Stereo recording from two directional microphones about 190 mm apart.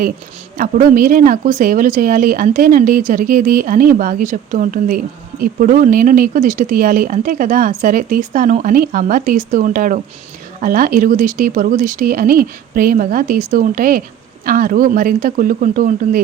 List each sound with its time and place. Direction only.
0.5 s speech: 45° right (ahead or behind)